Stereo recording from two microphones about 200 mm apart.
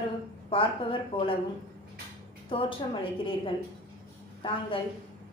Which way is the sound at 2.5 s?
25° left (ahead or behind).